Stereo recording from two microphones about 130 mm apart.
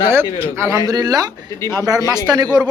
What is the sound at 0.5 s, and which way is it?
A man's voice, 20° right (ahead or behind).